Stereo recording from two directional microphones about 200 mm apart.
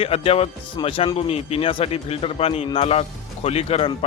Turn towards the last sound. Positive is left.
turn(degrees=30)  # may be behind; listen again after turning